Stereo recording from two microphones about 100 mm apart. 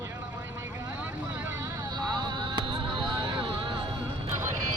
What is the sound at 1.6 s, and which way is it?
Vehicle, 45° right (ahead or behind).